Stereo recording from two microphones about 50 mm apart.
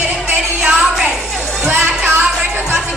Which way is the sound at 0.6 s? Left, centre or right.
Centre.